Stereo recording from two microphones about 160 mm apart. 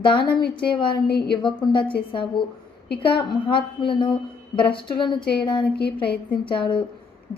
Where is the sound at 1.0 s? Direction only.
80° left.